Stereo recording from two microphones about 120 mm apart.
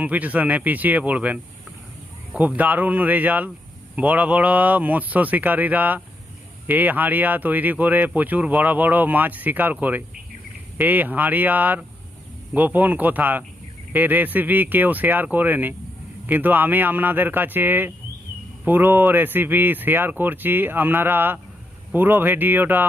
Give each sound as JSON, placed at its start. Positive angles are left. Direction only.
{"t": 0.0, "sound": "speech", "side_deg": -15}